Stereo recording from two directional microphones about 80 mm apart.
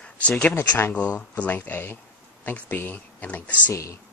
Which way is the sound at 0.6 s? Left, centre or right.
Left.